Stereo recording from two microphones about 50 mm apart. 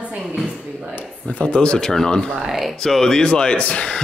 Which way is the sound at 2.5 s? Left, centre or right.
Centre.